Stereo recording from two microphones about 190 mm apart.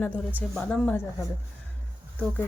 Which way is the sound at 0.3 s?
10° right (ahead or behind).